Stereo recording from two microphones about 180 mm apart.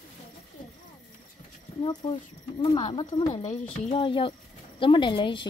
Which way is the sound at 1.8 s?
25° left (ahead or behind).